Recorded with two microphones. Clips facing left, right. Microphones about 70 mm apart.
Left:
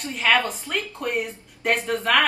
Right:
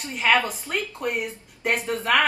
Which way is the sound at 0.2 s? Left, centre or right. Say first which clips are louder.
Even; centre.